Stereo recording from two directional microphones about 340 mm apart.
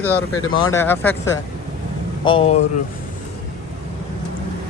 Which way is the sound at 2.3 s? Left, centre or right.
Centre.